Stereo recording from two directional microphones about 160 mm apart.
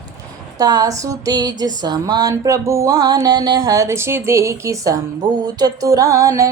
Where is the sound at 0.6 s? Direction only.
25° right (ahead or behind).